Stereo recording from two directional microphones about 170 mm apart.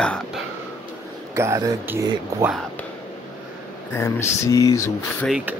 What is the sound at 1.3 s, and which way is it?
Speech, 15° right (ahead or behind).